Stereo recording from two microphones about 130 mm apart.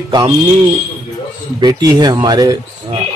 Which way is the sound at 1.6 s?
30° right (ahead or behind).